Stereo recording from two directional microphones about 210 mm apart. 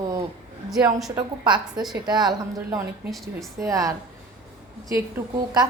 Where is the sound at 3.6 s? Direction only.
15° right (ahead or behind).